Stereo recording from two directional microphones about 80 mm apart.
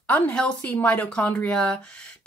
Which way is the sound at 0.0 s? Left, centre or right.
Centre.